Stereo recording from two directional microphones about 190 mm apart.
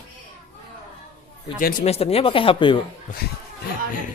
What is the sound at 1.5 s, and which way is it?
Speech, 40° left (ahead or behind).